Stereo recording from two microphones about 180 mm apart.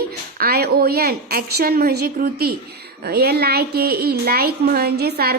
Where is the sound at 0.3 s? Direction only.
55° right (ahead or behind).